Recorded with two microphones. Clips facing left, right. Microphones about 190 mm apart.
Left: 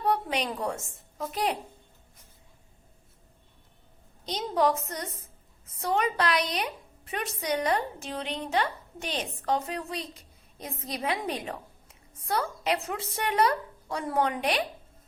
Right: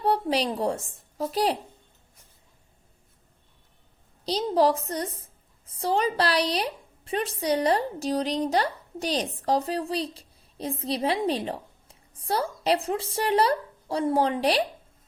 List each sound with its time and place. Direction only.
0.0 s a woman's voice: 30° right (ahead or behind)
4.3 s a woman's voice: 35° right (ahead or behind)